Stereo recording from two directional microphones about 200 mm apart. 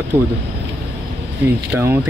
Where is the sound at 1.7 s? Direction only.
10° right (ahead or behind).